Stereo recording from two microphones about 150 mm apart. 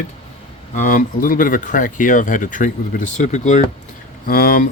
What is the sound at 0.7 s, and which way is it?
Speech, 60° left (ahead or behind).